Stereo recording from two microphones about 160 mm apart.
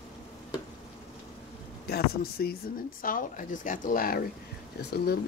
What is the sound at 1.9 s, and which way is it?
Speech, 70° left (ahead or behind).